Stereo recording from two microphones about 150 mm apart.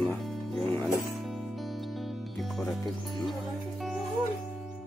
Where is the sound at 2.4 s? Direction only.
Centre (ahead or behind).